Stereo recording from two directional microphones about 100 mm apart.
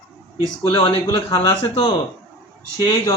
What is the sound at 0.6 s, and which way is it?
Speech, 70° left (ahead or behind).